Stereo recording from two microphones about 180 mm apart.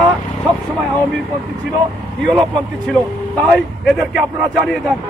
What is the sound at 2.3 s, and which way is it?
Speech, 25° right (ahead or behind).